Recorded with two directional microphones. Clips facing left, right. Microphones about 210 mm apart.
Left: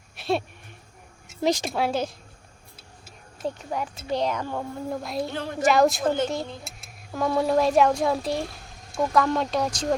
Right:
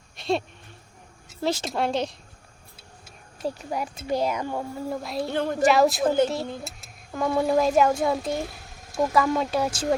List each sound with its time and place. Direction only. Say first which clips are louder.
0.2 s a sound: even; centre (ahead or behind)
1.4 s speech: left 3 dB; 15° left (ahead or behind)
1.7 s a woman's voice: even; 5° left (ahead or behind)
3.4 s a woman's voice: even; 10° right (ahead or behind)